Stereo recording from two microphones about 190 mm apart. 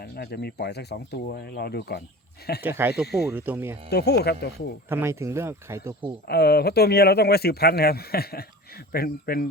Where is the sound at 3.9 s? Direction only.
60° left (ahead or behind).